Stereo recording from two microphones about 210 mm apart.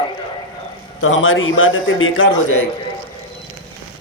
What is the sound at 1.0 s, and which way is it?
A man's voice, 70° left (ahead or behind).